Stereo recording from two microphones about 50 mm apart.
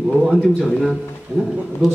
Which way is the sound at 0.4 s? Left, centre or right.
Centre.